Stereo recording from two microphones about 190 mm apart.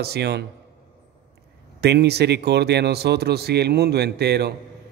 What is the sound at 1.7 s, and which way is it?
Speech, 60° right (ahead or behind).